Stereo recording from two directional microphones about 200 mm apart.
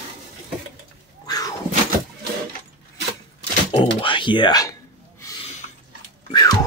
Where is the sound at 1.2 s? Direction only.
20° left (ahead or behind).